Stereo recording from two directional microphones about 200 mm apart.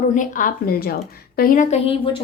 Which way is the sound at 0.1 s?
40° left (ahead or behind).